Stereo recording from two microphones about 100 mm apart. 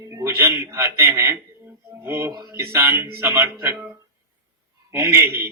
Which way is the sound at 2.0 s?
25° right (ahead or behind).